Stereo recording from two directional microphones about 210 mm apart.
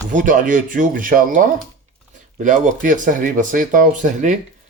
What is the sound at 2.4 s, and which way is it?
Speech, 35° right (ahead or behind).